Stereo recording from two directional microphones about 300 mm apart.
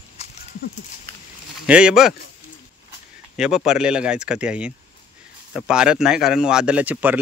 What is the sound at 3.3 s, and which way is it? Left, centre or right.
A man's voice, centre.